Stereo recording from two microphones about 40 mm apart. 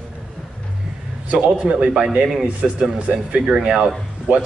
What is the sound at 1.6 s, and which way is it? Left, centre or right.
Speech, right.